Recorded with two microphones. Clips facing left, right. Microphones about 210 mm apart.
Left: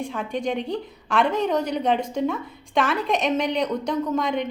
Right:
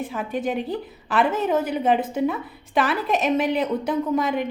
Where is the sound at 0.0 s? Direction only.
5° right (ahead or behind).